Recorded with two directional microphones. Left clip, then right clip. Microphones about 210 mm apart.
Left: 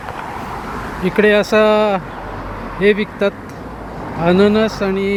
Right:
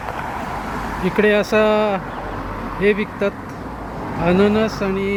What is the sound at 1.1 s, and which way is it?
Speech, 20° left (ahead or behind).